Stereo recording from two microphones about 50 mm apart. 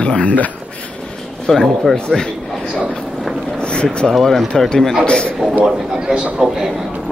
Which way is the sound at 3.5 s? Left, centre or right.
Centre.